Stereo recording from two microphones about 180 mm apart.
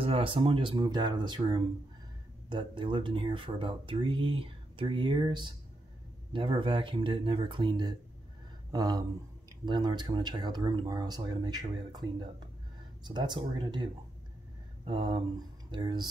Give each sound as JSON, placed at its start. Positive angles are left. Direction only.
{"t": 0.0, "sound": "speech", "side_deg": -30}
{"t": 14.9, "sound": "speech", "side_deg": -25}